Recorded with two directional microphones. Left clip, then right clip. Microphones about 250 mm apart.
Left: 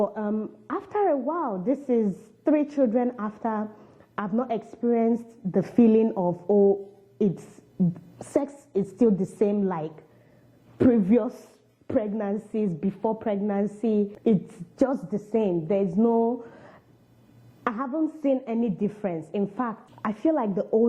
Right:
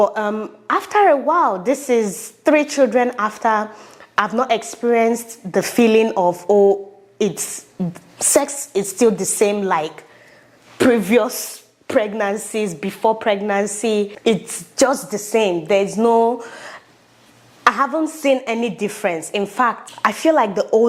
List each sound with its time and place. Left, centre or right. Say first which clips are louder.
0.1 s speech: right 9 dB; centre
1.6 s a woman's voice: right 8 dB; centre
4.4 s speech: right 10 dB; centre
6.5 s speech: right 7 dB; right
7.2 s a woman's voice: right 7 dB; centre
7.9 s speech: right 12 dB; centre
8.7 s a woman's voice: right 7 dB; centre
14.8 s speech: right 10 dB; centre
15.2 s a woman's voice: right 8 dB; centre
16.5 s a sound: right 14 dB; centre
17.7 s speech: right 10 dB; centre
18.2 s speech: right 10 dB; centre